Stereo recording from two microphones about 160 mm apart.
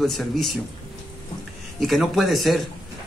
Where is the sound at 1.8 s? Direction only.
Centre (ahead or behind).